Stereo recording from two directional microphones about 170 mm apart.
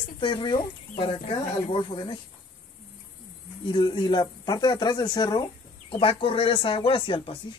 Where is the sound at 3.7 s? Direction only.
25° left (ahead or behind).